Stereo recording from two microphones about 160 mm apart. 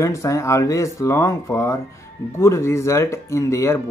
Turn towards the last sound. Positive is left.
turn(degrees=20)  # may be behind; listen again after turning